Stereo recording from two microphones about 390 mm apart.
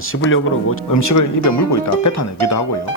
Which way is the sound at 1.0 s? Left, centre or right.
Left.